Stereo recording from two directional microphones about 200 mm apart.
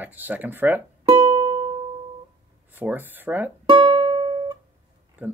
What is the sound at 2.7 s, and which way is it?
Speech, 10° right (ahead or behind).